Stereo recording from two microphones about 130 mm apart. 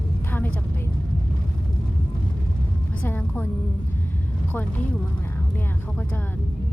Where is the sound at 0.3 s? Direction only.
15° left (ahead or behind).